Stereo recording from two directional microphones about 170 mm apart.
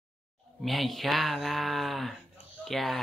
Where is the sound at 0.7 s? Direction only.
Centre (ahead or behind).